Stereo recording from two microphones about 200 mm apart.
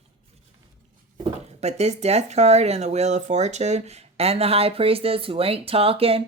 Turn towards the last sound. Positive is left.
turn(degrees=-30)  # may be behind; listen again after turning